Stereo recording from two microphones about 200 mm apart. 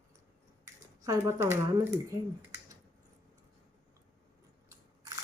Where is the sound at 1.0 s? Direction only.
15° right (ahead or behind).